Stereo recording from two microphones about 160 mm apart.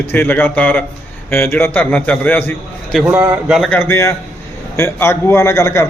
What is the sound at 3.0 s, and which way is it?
Speech, 10° right (ahead or behind).